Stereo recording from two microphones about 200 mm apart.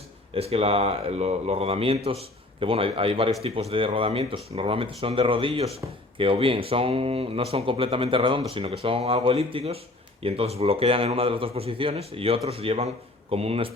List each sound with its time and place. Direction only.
0.3 s speech: 30° right (ahead or behind)